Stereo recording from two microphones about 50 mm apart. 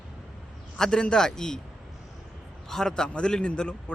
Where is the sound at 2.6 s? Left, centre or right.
Centre.